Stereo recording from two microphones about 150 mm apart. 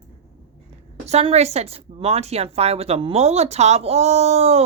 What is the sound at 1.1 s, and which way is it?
A woman's voice, 45° right (ahead or behind).